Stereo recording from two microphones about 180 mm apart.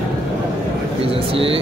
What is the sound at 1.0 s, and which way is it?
Speech, 30° right (ahead or behind).